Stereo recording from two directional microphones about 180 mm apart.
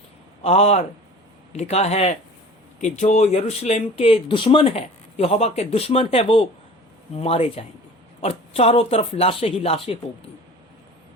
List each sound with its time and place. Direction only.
0.4 s speech: 35° left (ahead or behind)